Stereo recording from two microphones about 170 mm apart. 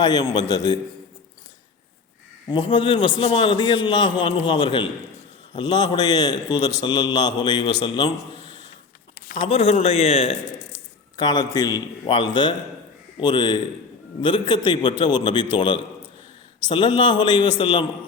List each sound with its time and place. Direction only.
0.0 s a man's voice: 25° left (ahead or behind)
2.5 s a man's voice: 30° left (ahead or behind)
8.3 s a sound: 40° right (ahead or behind)
9.4 s a man's voice: 35° left (ahead or behind)
11.2 s a man's voice: 25° left (ahead or behind)